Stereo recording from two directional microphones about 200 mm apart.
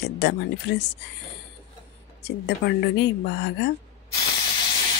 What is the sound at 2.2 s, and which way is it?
A woman's voice, 55° left (ahead or behind).